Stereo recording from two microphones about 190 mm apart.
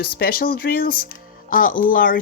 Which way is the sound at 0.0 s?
50° left (ahead or behind).